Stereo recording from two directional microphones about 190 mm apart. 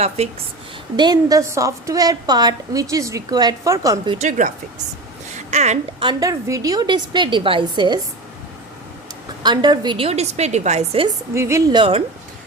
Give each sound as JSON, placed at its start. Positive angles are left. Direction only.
{"t": 0.2, "sound": "a woman's voice", "side_deg": -35}
{"t": 0.9, "sound": "a woman's voice", "side_deg": -20}
{"t": 4.2, "sound": "a woman's voice", "side_deg": -40}
{"t": 5.3, "sound": "a sound", "side_deg": -35}
{"t": 6.1, "sound": "a woman's voice", "side_deg": -20}
{"t": 9.4, "sound": "a woman's voice", "side_deg": -20}
{"t": 11.3, "sound": "a woman's voice", "side_deg": -15}